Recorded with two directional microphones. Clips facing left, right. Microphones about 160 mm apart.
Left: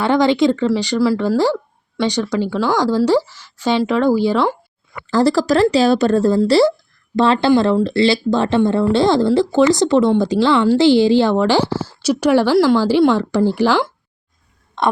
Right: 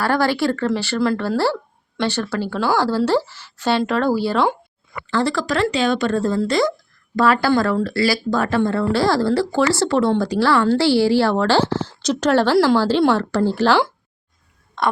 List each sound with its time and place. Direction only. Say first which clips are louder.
0.0 s speech: left 5 dB; 20° left (ahead or behind)
2.6 s speech: left 1 dB; 10° right (ahead or behind)
3.0 s speech: left 3 dB; 10° left (ahead or behind)
5.1 s a woman's voice: left 6 dB; 35° left (ahead or behind); by 13.7 s 15° left (ahead or behind)